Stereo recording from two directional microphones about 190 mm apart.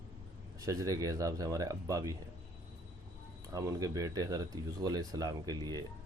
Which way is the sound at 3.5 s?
15° right (ahead or behind).